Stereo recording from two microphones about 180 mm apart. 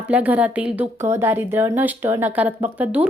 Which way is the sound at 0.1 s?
10° right (ahead or behind).